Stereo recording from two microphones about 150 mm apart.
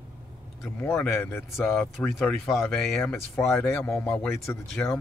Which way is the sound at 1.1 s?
15° left (ahead or behind).